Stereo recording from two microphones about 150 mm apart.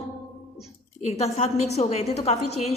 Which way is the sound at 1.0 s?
45° left (ahead or behind).